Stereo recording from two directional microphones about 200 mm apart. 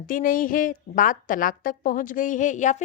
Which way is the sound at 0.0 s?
45° left (ahead or behind).